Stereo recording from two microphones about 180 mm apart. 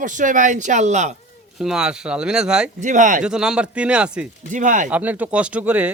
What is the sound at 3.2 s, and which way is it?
Speech, 5° right (ahead or behind).